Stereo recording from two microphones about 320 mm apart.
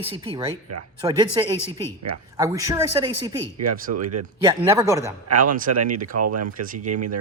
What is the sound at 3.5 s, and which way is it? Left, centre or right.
Speech, right.